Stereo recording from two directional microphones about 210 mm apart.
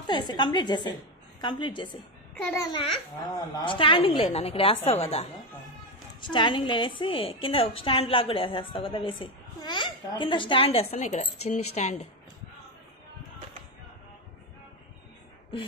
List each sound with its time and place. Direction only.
0.0 s a woman's voice: 20° left (ahead or behind)
2.3 s a child's voice: 5° left (ahead or behind)
2.6 s a woman's voice: 25° left (ahead or behind)